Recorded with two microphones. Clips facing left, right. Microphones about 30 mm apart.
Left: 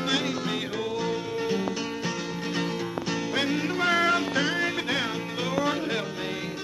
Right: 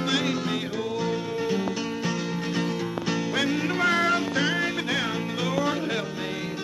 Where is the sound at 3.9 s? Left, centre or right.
Left.